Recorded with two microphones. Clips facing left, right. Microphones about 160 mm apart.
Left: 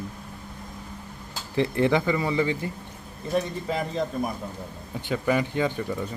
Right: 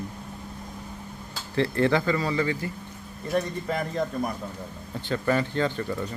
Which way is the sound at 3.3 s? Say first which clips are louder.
Even; 5° left (ahead or behind).